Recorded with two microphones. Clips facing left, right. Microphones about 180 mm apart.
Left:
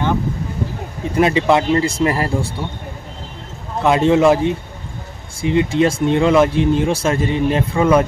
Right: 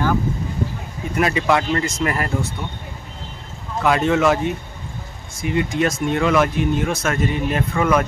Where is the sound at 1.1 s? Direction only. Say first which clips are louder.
Left 4 dB; 25° left (ahead or behind).